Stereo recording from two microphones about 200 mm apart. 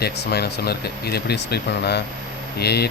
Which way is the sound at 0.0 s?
55° left (ahead or behind).